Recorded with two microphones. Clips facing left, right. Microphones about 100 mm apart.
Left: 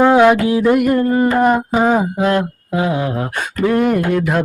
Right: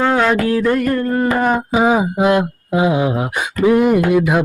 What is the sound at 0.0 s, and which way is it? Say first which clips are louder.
Mantra: left 5 dB; 15° left (ahead or behind).